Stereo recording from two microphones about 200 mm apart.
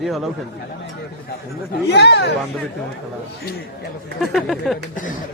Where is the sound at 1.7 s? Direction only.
55° left (ahead or behind).